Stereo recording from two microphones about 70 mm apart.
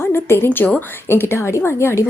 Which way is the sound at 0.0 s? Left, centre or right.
Left.